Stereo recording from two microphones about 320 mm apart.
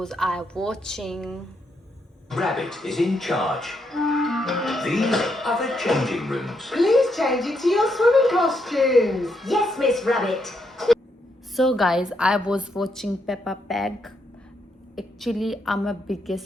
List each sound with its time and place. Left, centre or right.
0.0 s speech: centre